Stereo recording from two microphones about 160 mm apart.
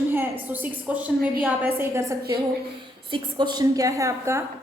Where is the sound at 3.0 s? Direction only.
30° right (ahead or behind).